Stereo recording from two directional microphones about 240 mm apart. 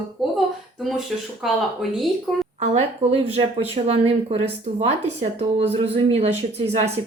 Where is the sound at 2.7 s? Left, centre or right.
Right.